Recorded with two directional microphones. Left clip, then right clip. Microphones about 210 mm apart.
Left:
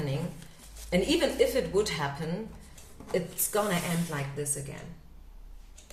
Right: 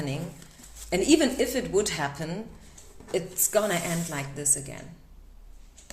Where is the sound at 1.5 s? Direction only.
45° right (ahead or behind).